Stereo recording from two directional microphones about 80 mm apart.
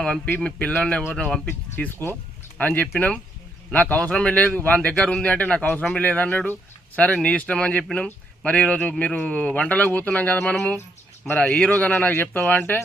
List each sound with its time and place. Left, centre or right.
0.3 s speech: centre
1.7 s speech: left